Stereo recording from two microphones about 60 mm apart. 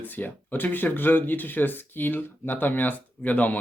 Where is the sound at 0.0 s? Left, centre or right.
Left.